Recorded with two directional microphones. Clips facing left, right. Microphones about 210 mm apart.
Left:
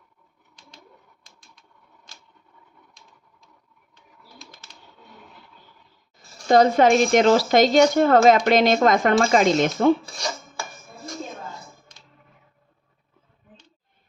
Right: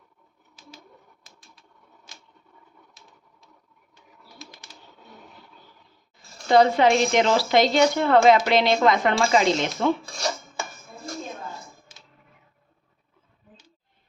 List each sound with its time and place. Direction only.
0.6 s pigeon: 5° right (ahead or behind)
1.2 s typewriter: 5° right (ahead or behind)
2.1 s scissors: 15° right (ahead or behind)
3.0 s a sound: 5° right (ahead or behind)
4.4 s typing: centre (ahead or behind)
6.5 s speech: 45° left (ahead or behind)